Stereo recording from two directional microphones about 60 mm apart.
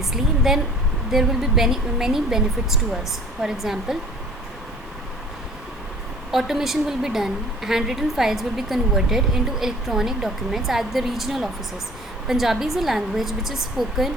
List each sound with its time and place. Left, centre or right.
0.0 s a woman's voice: centre
6.3 s a woman's voice: centre